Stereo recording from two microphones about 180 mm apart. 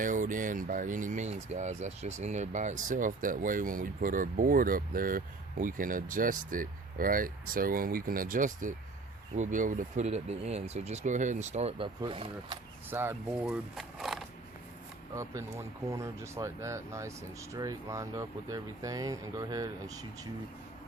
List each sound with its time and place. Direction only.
0.0 s speech: 45° right (ahead or behind); by 12.5 s 30° right (ahead or behind)
12.9 s speech: 10° right (ahead or behind)
15.1 s speech: 15° right (ahead or behind)